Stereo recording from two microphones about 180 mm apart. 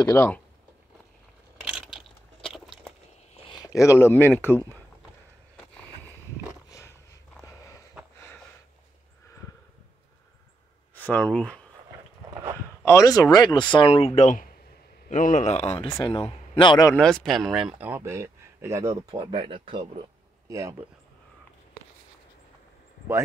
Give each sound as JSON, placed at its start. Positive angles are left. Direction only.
{"t": 0.0, "sound": "speech", "side_deg": 10}
{"t": 2.4, "sound": "a sound", "side_deg": 0}
{"t": 3.4, "sound": "speech", "side_deg": 20}
{"t": 7.4, "sound": "sniff", "side_deg": 15}
{"t": 11.1, "sound": "speech", "side_deg": 5}
{"t": 12.8, "sound": "a man's voice", "side_deg": 20}
{"t": 16.9, "sound": "speech", "side_deg": 5}
{"t": 19.1, "sound": "speech", "side_deg": -30}
{"t": 20.4, "sound": "speech", "side_deg": -15}